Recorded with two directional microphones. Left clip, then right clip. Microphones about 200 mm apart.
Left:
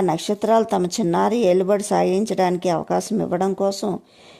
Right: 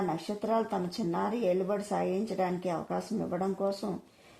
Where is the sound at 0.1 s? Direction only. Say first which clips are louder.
Left 13 dB; 35° left (ahead or behind).